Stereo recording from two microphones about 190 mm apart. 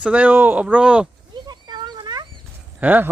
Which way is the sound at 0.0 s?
5° right (ahead or behind).